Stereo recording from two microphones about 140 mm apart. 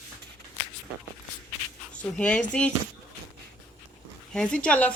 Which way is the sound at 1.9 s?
10° left (ahead or behind).